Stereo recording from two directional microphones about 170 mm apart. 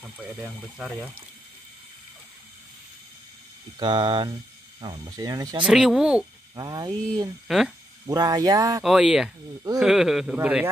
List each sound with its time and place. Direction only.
0.0 s speech: 5° right (ahead or behind)
3.8 s speech: 25° right (ahead or behind)
5.6 s speech: 5° right (ahead or behind)
6.5 s speech: 20° right (ahead or behind)
7.4 s speech: centre (ahead or behind)
8.1 s speech: 20° right (ahead or behind)
8.8 s speech: 5° right (ahead or behind)